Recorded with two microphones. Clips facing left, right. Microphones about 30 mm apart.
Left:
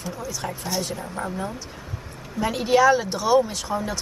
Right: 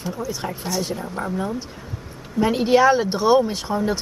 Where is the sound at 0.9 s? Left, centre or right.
Centre.